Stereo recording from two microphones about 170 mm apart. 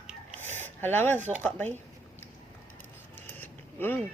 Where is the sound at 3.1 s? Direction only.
10° left (ahead or behind).